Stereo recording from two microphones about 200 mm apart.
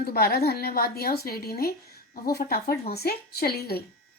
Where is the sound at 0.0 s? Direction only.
50° left (ahead or behind).